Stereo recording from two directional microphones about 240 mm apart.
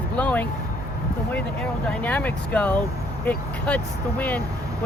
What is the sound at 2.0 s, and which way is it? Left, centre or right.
Speech, centre.